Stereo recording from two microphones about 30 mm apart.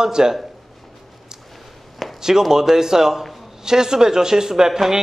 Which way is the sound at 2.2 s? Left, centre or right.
Centre.